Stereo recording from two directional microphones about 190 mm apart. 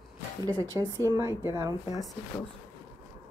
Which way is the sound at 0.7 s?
20° right (ahead or behind).